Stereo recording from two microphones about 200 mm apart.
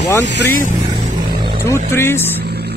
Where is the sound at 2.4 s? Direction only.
55° right (ahead or behind).